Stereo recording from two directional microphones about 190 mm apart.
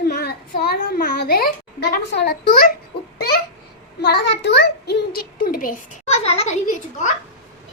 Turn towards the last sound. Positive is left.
turn(degrees=40)  # may be behind; listen again after turning